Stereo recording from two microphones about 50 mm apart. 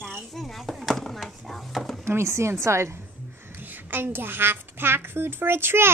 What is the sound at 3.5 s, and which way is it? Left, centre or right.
A child's voice, right.